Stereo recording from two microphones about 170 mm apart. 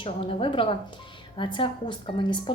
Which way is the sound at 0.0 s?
30° left (ahead or behind).